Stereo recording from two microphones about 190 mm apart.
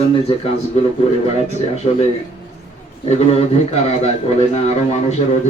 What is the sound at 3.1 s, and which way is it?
A man's voice, 35° left (ahead or behind).